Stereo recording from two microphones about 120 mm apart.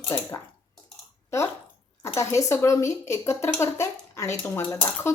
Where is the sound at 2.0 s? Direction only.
25° left (ahead or behind).